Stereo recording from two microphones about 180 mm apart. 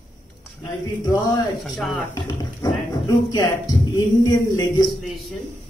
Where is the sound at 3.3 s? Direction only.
20° left (ahead or behind).